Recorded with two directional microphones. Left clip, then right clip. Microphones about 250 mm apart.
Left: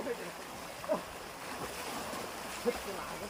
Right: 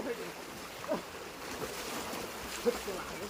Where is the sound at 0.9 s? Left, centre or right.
Centre.